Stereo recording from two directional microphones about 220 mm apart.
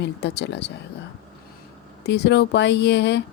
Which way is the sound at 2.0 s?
50° left (ahead or behind).